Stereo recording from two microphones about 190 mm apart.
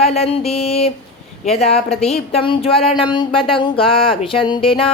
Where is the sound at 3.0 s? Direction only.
25° left (ahead or behind).